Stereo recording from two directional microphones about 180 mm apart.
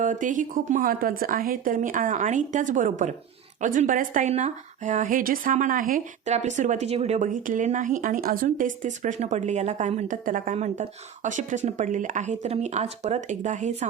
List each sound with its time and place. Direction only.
0.0 s speech: 45° right (ahead or behind)